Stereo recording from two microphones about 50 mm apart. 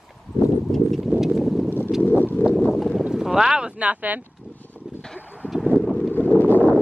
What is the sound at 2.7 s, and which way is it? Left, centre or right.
Boat, centre.